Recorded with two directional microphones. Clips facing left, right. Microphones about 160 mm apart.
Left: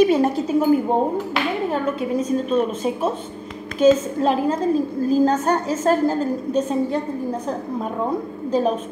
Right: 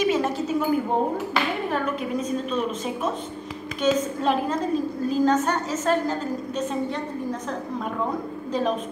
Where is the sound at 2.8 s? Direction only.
30° left (ahead or behind).